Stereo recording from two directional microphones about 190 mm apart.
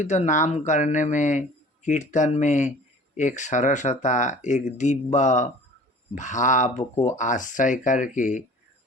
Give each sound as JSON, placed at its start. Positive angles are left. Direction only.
{"t": 0.0, "sound": "speech", "side_deg": 40}